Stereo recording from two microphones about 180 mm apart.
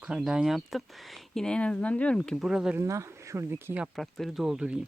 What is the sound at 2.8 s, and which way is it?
Speech, 15° right (ahead or behind).